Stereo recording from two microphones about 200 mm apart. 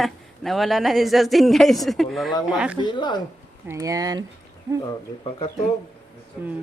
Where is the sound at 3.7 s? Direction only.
15° right (ahead or behind).